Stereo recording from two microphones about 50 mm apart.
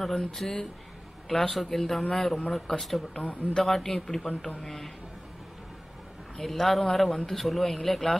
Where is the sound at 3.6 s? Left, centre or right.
Centre.